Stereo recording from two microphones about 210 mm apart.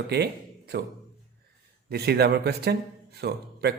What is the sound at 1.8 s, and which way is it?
A man's voice, 50° right (ahead or behind).